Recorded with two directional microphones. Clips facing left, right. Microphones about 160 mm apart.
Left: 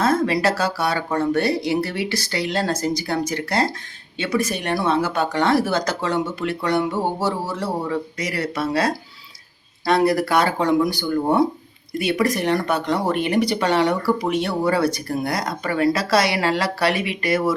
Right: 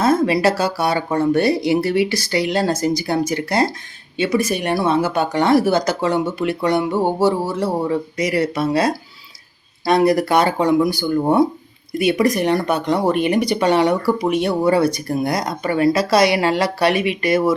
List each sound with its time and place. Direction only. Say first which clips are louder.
0.0 s speech: right 3 dB; 10° right (ahead or behind)